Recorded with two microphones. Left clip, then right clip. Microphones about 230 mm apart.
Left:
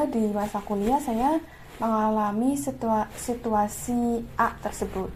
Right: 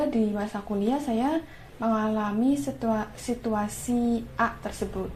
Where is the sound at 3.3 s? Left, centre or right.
Left.